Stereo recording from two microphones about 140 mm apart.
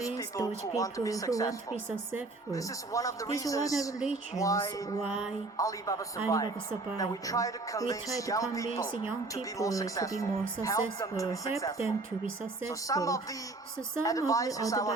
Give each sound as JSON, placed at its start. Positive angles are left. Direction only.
{"t": 0.2, "sound": "speech", "side_deg": 25}
{"t": 12.6, "sound": "speech", "side_deg": 25}